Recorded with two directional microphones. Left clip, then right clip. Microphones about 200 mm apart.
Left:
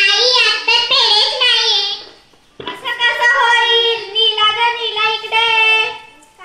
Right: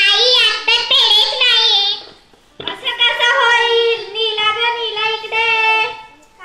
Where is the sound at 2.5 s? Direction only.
45° left (ahead or behind).